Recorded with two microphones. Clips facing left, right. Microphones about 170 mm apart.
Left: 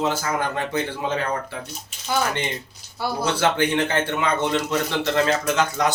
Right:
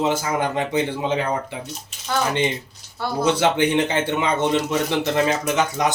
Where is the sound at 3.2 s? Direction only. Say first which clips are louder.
Right 3 dB; 20° right (ahead or behind).